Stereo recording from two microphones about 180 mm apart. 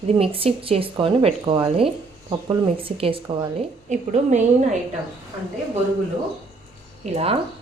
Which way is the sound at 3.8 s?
40° right (ahead or behind).